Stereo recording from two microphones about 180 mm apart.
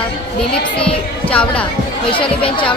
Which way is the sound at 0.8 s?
5° left (ahead or behind).